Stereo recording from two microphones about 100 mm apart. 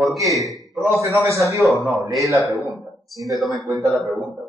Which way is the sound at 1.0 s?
30° right (ahead or behind).